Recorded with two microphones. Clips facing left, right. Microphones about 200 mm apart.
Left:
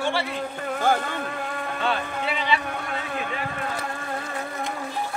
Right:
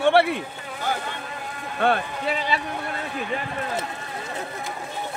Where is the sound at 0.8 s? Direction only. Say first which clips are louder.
Left 5 dB; 50° left (ahead or behind).